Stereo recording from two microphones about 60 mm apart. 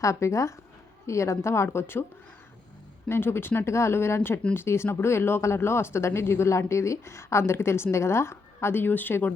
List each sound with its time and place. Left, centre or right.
0.0 s speech: left
3.1 s speech: left
3.7 s speech: left